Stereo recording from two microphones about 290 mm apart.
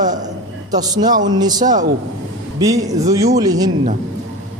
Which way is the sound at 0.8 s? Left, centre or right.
Centre.